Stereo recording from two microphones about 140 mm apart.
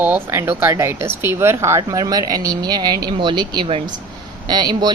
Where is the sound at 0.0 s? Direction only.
15° right (ahead or behind).